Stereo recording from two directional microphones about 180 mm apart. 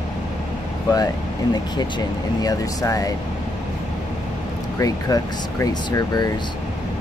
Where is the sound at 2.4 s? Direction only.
20° left (ahead or behind).